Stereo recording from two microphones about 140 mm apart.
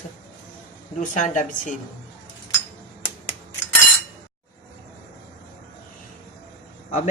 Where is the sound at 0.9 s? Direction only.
65° left (ahead or behind).